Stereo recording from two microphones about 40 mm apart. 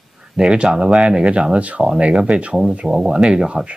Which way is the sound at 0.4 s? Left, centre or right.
Centre.